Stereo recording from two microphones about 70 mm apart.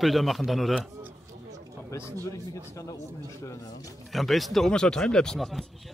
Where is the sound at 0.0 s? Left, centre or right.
Centre.